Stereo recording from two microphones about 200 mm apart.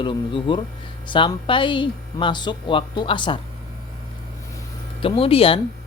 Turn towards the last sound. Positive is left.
turn(degrees=30)  # may be behind; listen again after turning